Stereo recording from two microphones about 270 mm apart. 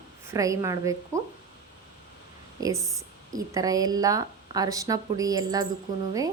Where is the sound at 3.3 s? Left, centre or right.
Centre.